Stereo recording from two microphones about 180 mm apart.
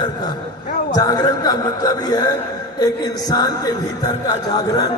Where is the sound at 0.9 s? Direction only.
20° left (ahead or behind).